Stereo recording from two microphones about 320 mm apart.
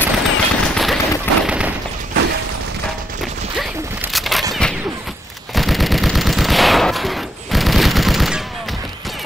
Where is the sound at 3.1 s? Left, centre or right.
Centre.